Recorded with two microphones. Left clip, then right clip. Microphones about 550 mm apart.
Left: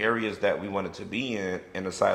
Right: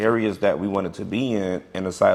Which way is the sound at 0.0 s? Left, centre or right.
Right.